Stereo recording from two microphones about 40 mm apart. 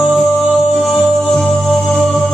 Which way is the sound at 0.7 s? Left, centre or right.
Centre.